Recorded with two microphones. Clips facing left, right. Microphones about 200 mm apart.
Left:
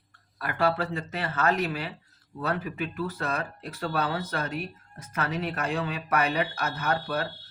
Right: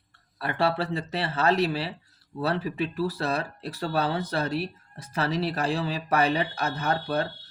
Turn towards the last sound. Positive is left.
turn(degrees=-35)  # may be behind; listen again after turning